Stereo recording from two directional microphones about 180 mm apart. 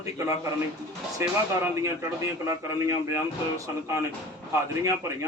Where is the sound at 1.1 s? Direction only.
15° right (ahead or behind).